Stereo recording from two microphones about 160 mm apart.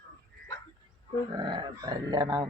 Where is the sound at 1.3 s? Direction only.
30° right (ahead or behind).